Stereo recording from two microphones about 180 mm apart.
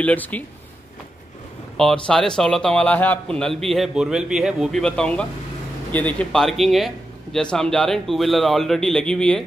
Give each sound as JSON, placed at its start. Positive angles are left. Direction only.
{"t": 0.0, "sound": "speech", "side_deg": 10}
{"t": 1.8, "sound": "a man's voice", "side_deg": 5}